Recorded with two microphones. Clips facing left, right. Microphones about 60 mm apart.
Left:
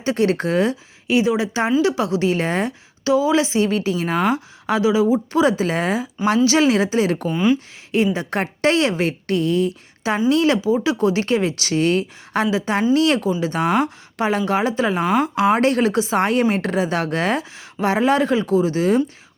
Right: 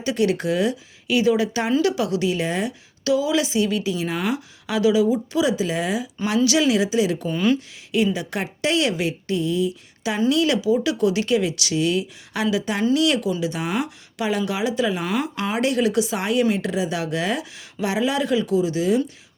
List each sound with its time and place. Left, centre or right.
0.0 s speech: left
3.0 s speech: left
5.3 s a woman's voice: left
7.3 s speech: centre
8.1 s a woman's voice: left
10.2 s a woman's voice: left